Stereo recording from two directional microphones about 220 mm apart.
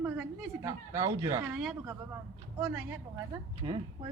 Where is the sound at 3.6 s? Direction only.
20° right (ahead or behind).